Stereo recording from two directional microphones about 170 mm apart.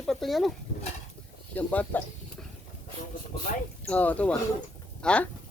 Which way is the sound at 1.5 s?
10° left (ahead or behind).